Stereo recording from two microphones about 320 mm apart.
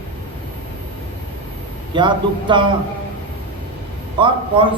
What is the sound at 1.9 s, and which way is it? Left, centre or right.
Speech, centre.